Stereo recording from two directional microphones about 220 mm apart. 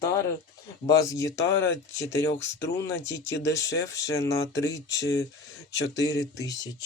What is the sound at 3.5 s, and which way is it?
Speech, 15° left (ahead or behind).